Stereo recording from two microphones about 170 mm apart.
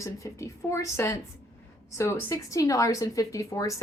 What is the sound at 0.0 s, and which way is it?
A woman's voice, 20° left (ahead or behind).